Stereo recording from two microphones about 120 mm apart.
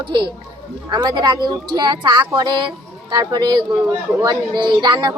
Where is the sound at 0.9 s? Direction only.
40° right (ahead or behind).